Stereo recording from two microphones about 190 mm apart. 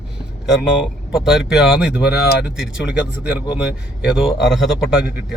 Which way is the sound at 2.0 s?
55° left (ahead or behind).